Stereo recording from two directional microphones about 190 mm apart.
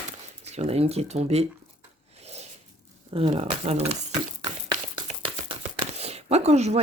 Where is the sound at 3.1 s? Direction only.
30° right (ahead or behind).